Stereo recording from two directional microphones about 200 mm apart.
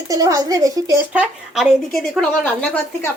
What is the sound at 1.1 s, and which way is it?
A woman's voice, 5° right (ahead or behind).